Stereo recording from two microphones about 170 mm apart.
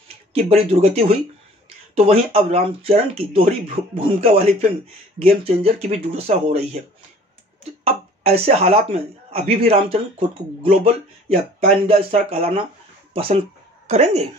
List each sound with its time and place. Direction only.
0.3 s speech: 35° right (ahead or behind)
7.8 s speech: 35° right (ahead or behind)